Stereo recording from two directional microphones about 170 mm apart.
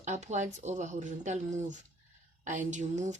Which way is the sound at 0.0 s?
45° right (ahead or behind).